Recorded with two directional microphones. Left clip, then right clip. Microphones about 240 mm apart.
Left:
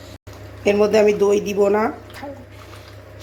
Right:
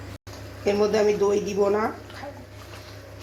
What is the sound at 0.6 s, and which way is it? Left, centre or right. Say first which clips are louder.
A woman's voice: left 6 dB; left.